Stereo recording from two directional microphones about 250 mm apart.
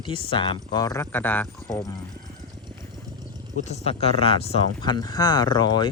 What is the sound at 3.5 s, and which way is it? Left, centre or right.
Speech, left.